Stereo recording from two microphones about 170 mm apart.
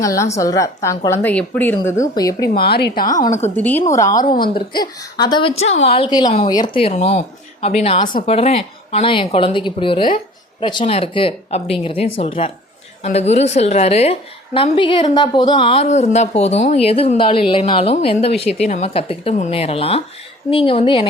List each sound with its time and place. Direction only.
0.0 s a woman's voice: 20° left (ahead or behind)
2.6 s a woman's voice: 70° left (ahead or behind); by 3.3 s 50° left (ahead or behind)
3.5 s a woman's voice: 10° left (ahead or behind)
4.1 s a woman's voice: 55° left (ahead or behind)
4.7 s a woman's voice: 25° left (ahead or behind)
6.8 s a woman's voice: 40° left (ahead or behind)